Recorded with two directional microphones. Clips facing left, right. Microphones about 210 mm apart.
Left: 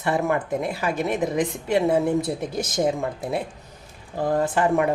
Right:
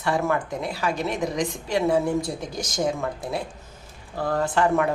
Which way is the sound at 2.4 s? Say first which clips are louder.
Left 4 dB; 60° left (ahead or behind).